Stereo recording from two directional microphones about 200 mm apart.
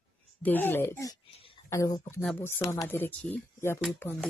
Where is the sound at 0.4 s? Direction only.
10° left (ahead or behind).